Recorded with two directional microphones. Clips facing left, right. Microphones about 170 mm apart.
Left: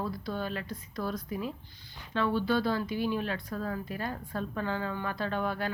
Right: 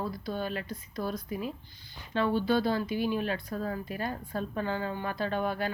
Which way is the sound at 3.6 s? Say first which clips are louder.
Right 1 dB; 30° right (ahead or behind).